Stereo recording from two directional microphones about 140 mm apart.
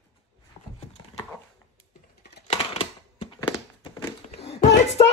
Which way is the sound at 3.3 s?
30° left (ahead or behind).